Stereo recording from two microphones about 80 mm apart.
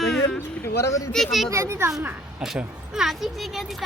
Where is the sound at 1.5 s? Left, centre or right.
Right.